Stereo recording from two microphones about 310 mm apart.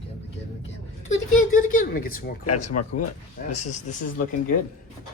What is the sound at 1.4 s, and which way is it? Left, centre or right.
Speech, left.